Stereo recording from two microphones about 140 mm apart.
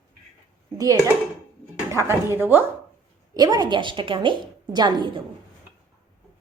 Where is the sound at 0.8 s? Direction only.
25° right (ahead or behind).